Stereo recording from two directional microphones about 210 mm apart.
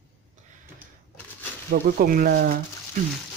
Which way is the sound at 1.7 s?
45° right (ahead or behind).